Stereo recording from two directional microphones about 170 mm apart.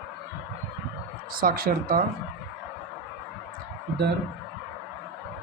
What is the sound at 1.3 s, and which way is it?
Speech, 60° right (ahead or behind).